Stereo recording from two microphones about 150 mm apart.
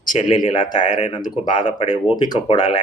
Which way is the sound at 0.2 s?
45° left (ahead or behind).